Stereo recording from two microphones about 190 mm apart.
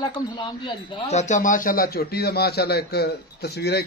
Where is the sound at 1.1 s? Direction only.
40° left (ahead or behind).